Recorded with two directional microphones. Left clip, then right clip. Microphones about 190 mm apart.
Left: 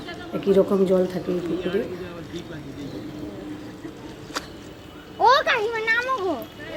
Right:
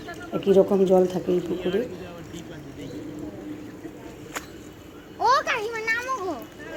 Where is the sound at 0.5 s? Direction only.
5° right (ahead or behind).